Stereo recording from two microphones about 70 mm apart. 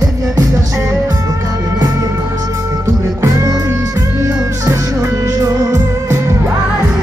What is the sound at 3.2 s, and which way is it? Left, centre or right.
Music, right.